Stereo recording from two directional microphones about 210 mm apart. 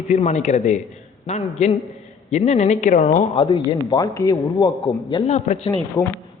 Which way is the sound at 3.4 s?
20° left (ahead or behind).